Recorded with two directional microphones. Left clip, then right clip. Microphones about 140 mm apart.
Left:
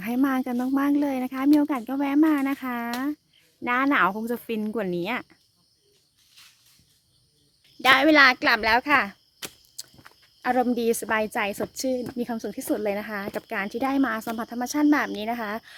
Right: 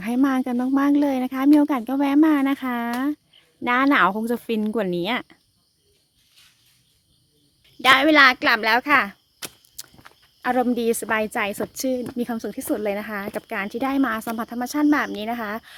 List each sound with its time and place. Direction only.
0.0 s speech: 10° right (ahead or behind)
7.8 s a child's voice: 10° right (ahead or behind)